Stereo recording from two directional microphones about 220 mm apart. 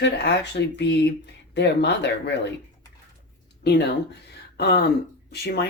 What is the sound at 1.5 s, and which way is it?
Speech, 50° left (ahead or behind).